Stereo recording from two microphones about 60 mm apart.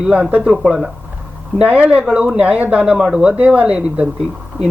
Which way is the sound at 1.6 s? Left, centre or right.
Right.